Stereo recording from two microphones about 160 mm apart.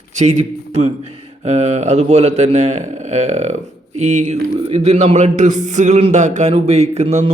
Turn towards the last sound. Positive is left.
turn(degrees=-40)  # may be behind; listen again after turning